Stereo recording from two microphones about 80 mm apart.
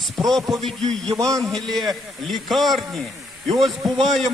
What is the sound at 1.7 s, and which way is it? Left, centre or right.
A man's voice, centre.